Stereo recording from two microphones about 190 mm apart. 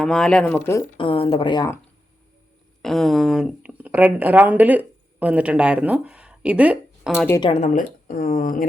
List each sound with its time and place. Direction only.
0.0 s speech: 5° left (ahead or behind)
0.9 s speech: 30° left (ahead or behind)
2.8 s speech: centre (ahead or behind)
7.3 s speech: 25° left (ahead or behind)
7.6 s speech: 45° left (ahead or behind)